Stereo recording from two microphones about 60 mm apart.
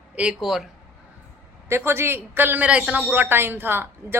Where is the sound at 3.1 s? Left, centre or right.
Right.